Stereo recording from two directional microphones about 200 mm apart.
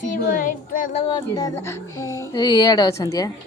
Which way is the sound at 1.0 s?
20° left (ahead or behind).